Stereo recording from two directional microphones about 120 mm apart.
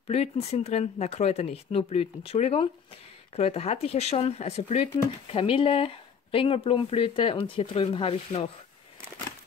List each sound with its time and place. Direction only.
0.1 s speech: 60° left (ahead or behind)
5.3 s speech: 50° left (ahead or behind)